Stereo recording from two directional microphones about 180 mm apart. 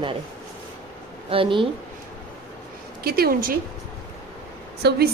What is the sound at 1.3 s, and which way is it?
Speech, 30° right (ahead or behind).